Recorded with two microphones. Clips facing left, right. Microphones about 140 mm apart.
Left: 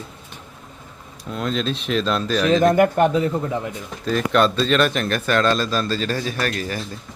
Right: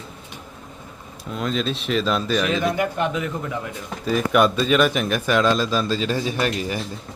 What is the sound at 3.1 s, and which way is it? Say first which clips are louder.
Speech: left 6 dB; 35° left (ahead or behind).